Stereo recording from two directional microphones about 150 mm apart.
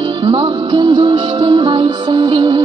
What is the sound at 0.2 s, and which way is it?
Music, 30° right (ahead or behind).